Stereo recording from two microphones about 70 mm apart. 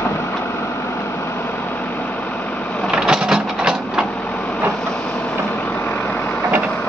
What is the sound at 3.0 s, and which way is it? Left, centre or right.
Train, centre.